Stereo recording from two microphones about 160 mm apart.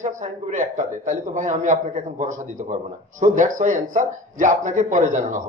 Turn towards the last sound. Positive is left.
turn(degrees=-50)  # may be behind; listen again after turning